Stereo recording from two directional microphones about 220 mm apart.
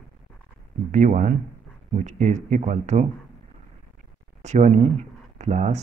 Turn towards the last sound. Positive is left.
turn(degrees=-30)  # may be behind; listen again after turning